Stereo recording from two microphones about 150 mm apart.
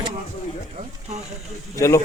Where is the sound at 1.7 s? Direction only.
20° left (ahead or behind).